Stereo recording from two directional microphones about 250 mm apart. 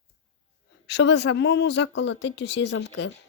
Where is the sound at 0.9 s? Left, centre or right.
Left.